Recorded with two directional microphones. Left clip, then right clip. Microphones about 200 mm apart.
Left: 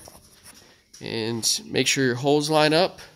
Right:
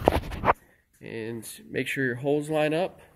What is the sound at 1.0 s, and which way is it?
Speech, 30° left (ahead or behind).